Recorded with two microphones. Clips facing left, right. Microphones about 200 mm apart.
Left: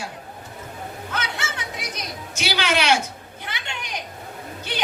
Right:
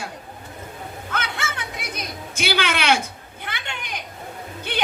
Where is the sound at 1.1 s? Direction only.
55° right (ahead or behind).